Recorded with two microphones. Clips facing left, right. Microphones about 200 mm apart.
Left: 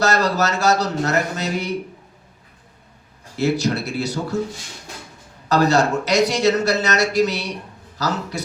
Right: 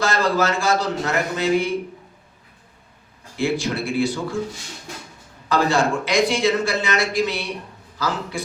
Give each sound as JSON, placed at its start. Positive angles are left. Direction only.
{"t": 0.0, "sound": "speech", "side_deg": 40}
{"t": 3.3, "sound": "speech", "side_deg": 40}
{"t": 5.5, "sound": "speech", "side_deg": 40}